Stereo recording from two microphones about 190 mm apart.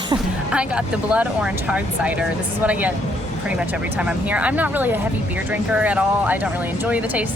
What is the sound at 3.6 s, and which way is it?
Speech, 5° right (ahead or behind).